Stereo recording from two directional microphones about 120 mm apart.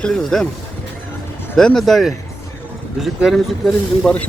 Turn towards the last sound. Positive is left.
turn(degrees=5)  # may be behind; listen again after turning